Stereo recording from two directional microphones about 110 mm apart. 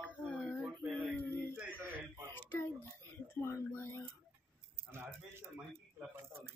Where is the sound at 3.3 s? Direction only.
20° left (ahead or behind).